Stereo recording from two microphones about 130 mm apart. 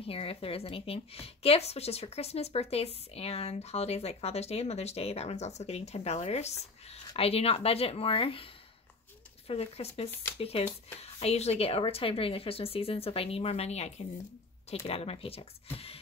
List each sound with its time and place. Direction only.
0.0 s a woman's voice: 45° left (ahead or behind)
9.5 s a woman's voice: 50° left (ahead or behind)